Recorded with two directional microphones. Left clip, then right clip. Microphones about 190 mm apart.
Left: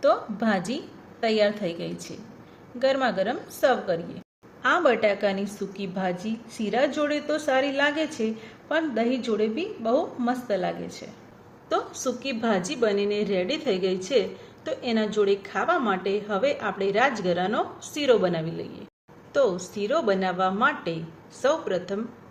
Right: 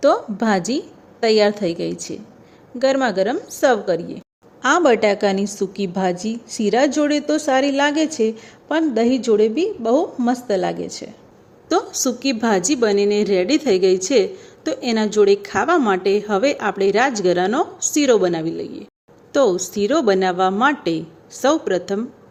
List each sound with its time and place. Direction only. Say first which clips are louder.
0.0 s a woman's voice: right 6 dB; 55° right (ahead or behind)
19.3 s a woman's voice: right 7 dB; 50° right (ahead or behind)